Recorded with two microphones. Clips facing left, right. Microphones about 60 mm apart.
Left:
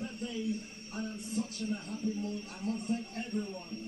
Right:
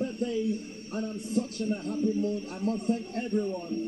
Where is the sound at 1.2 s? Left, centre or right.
Right.